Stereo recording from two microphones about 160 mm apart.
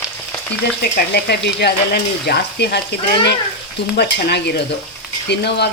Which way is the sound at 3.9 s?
90° left.